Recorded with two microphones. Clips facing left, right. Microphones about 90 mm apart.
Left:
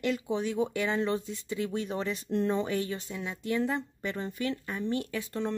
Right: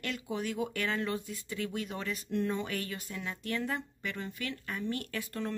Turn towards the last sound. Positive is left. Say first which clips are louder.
# left 4 dB
turn(degrees=20)  # may be behind; listen again after turning